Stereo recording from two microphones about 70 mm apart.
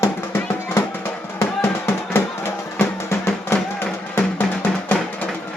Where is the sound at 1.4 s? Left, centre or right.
Left.